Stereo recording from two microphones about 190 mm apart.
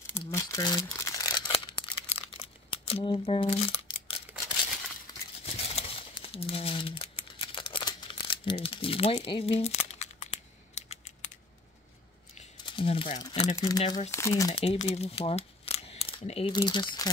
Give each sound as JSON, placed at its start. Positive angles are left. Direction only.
{"t": 0.1, "sound": "crumpling", "side_deg": 15}
{"t": 1.5, "sound": "crumpling", "side_deg": 30}
{"t": 5.1, "sound": "a sound", "side_deg": 20}
{"t": 5.4, "sound": "crumpling", "side_deg": 30}
{"t": 12.4, "sound": "a sound", "side_deg": 30}
{"t": 13.2, "sound": "speech", "side_deg": 25}
{"t": 14.5, "sound": "speech", "side_deg": 30}